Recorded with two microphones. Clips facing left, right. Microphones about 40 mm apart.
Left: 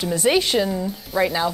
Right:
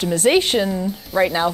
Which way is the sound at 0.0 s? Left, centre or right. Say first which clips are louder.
Right 3 dB; right.